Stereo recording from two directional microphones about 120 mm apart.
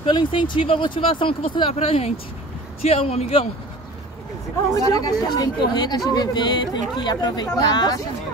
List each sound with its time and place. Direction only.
0.0 s speech: 45° left (ahead or behind)
1.8 s speech: 60° left (ahead or behind)
4.7 s speech: 30° left (ahead or behind)